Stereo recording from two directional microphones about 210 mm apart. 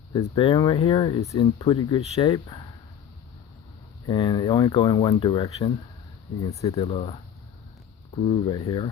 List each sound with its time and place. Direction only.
0.1 s speech: 20° left (ahead or behind)
4.0 s speech: 20° left (ahead or behind)
6.6 s speech: 25° left (ahead or behind)